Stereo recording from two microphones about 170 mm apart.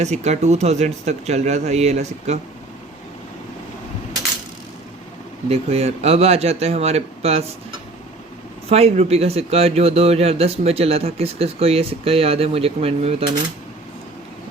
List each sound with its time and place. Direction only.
0.0 s speech: 40° right (ahead or behind)
5.5 s speech: 40° right (ahead or behind)
8.7 s speech: 35° right (ahead or behind)